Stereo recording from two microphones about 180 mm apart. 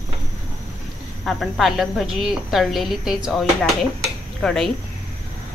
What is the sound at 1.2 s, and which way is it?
Speech, centre (ahead or behind).